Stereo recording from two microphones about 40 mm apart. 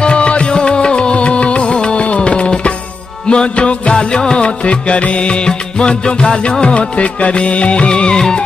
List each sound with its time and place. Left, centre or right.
0.0 s music: left